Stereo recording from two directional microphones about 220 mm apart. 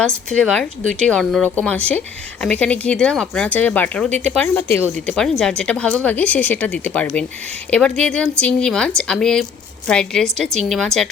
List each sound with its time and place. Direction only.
0.3 s speech: 5° left (ahead or behind)